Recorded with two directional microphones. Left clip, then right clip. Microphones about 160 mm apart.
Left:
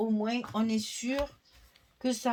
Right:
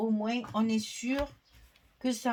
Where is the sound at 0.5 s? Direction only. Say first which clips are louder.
Even; 45° left (ahead or behind).